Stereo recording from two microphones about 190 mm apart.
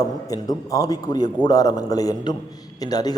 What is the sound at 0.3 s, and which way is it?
A man's voice, 20° left (ahead or behind).